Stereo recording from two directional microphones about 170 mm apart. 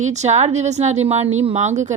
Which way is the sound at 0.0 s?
45° right (ahead or behind).